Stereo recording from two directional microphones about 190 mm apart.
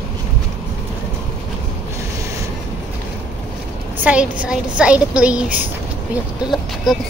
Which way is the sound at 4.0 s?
5° right (ahead or behind).